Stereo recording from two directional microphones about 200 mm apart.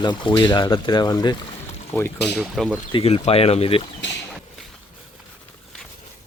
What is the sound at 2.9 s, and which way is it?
Speech, 25° left (ahead or behind).